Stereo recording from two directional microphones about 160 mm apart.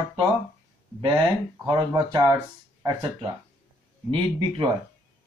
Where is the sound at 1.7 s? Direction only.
25° right (ahead or behind).